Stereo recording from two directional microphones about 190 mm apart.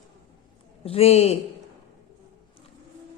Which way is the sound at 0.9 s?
30° left (ahead or behind).